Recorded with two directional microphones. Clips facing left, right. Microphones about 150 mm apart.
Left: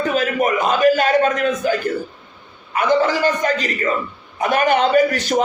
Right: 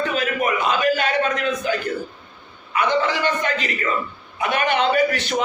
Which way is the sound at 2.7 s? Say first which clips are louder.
Left 4 dB; 40° left (ahead or behind).